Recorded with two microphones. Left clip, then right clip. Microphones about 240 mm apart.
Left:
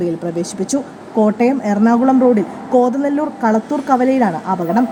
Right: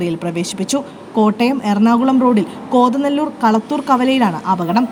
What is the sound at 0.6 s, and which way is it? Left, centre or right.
A woman's voice, right.